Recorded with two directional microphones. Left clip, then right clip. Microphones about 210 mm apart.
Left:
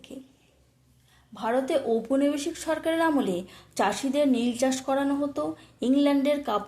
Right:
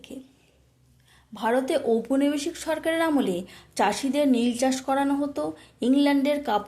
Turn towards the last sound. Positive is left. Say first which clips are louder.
# right 1 dB
turn(degrees=-10)  # may be behind; listen again after turning